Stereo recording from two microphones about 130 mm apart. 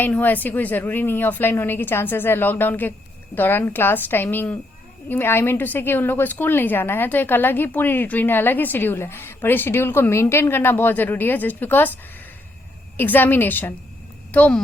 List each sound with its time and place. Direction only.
0.0 s a woman's voice: 15° left (ahead or behind)
13.0 s a woman's voice: 15° left (ahead or behind)